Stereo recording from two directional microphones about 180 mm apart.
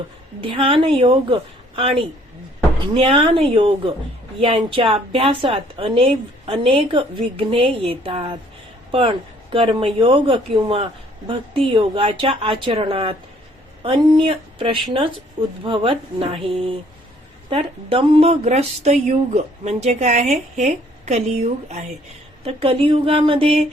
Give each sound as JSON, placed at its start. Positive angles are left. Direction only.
{"t": 0.5, "sound": "a woman's voice", "side_deg": -30}